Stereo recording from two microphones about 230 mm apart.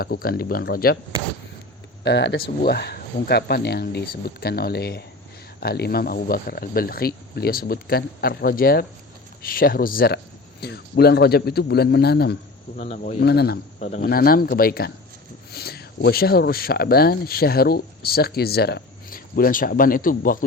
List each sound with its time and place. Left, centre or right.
0.0 s speech: left
2.0 s speech: left
12.7 s speech: left
13.1 s speech: left